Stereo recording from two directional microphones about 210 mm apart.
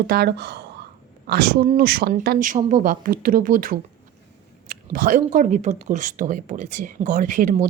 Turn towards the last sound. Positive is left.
turn(degrees=-40)  # may be behind; listen again after turning